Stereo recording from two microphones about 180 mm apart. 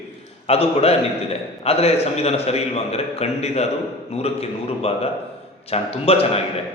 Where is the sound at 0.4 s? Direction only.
35° left (ahead or behind).